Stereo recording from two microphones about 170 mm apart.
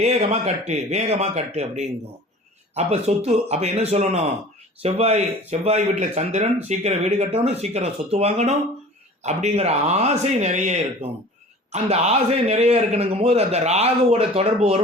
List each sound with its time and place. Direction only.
0.0 s a man's voice: 40° right (ahead or behind)